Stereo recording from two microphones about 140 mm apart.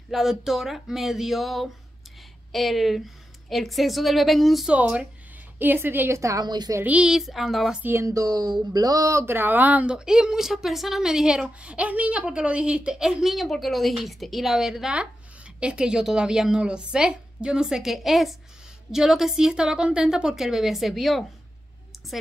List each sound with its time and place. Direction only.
0.1 s a woman's voice: 5° right (ahead or behind); by 6.8 s 30° right (ahead or behind)
6.8 s speech: 10° right (ahead or behind)
7.8 s speech: 20° right (ahead or behind); by 21.3 s centre (ahead or behind)